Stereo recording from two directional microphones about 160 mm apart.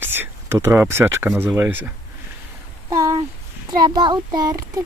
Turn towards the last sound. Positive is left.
turn(degrees=-25)  # may be behind; listen again after turning